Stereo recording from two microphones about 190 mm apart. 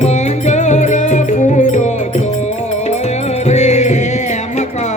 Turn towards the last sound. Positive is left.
turn(degrees=35)  # may be behind; listen again after turning